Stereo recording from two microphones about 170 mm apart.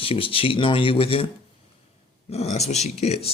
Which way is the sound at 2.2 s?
40° left (ahead or behind).